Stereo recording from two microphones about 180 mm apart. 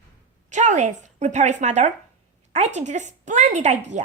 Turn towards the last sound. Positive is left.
turn(degrees=-40)  # may be behind; listen again after turning